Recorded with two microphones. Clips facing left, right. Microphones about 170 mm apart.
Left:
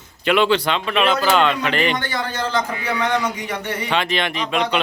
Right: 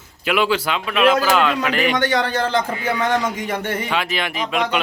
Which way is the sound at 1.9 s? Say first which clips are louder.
Right 5 dB; 75° right (ahead or behind).